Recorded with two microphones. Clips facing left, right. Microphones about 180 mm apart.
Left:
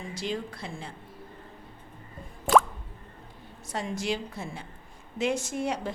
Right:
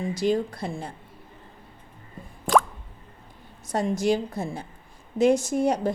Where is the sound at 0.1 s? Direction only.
40° right (ahead or behind).